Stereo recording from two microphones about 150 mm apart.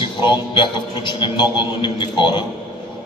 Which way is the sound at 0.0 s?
30° left (ahead or behind).